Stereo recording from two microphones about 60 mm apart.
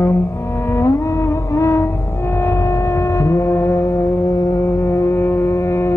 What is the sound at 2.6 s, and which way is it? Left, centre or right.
Hum, left.